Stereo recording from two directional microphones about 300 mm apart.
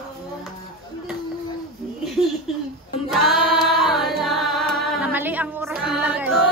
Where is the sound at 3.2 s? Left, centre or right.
Centre.